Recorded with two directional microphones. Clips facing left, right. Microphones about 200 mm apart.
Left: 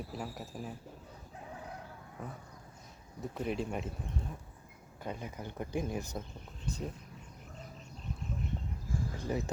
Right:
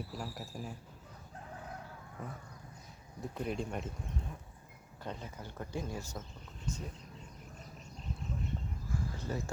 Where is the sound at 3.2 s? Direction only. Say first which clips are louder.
Left 2 dB; centre (ahead or behind).